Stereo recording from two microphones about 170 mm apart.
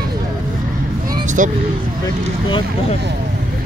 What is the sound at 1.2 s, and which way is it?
Speech, 50° right (ahead or behind).